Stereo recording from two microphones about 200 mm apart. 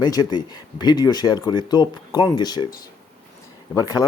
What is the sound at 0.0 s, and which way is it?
Speech, 20° left (ahead or behind).